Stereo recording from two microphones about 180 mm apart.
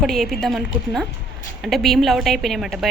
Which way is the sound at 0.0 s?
Centre (ahead or behind).